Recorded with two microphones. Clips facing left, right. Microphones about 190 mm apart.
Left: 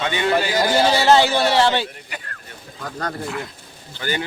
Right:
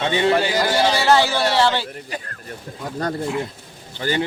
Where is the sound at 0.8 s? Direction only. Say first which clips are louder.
Left 2 dB; 25° left (ahead or behind).